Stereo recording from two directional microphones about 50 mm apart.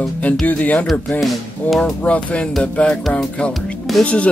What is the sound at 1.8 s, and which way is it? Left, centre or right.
Music, left.